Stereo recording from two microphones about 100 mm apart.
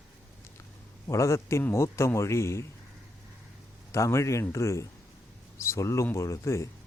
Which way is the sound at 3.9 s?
30° left (ahead or behind).